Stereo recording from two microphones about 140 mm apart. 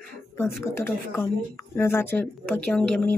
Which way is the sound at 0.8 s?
20° left (ahead or behind).